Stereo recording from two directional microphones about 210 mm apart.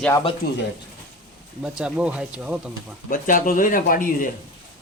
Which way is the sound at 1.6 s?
5° right (ahead or behind).